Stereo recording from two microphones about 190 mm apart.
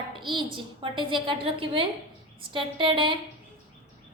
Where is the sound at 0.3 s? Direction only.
25° right (ahead or behind).